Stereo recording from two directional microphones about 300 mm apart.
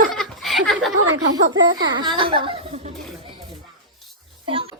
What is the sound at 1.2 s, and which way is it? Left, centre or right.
Speech, centre.